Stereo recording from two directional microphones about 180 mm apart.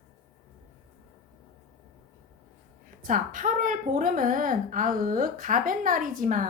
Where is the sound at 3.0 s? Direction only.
45° right (ahead or behind).